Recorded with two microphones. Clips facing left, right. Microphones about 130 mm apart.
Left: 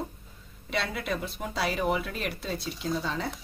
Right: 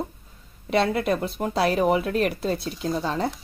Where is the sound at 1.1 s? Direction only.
60° right (ahead or behind).